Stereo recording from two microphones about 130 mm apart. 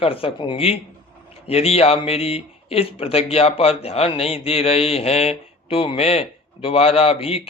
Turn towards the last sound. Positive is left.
turn(degrees=45)  # may be behind; listen again after turning